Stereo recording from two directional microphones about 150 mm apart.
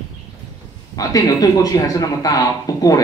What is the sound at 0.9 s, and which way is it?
Speech, 25° left (ahead or behind).